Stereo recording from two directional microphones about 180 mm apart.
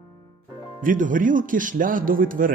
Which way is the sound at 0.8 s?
45° right (ahead or behind).